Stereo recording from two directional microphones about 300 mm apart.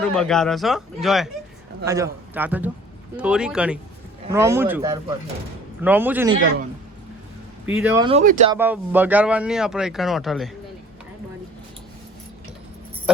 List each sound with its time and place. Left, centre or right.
0.0 s a man's voice: centre
7.8 s speech: centre
8.0 s speech: right
8.5 s speech: centre